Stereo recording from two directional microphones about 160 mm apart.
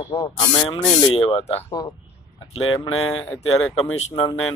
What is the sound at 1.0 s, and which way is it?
Speech, 35° left (ahead or behind).